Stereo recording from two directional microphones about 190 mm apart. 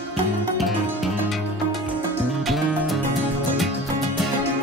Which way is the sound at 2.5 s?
Centre (ahead or behind).